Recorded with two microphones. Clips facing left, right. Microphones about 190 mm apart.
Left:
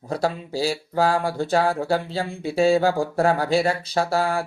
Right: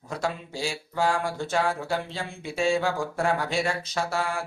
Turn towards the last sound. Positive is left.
turn(degrees=35)  # may be behind; listen again after turning